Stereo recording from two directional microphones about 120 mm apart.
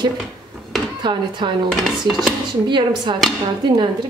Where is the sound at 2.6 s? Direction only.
40° right (ahead or behind).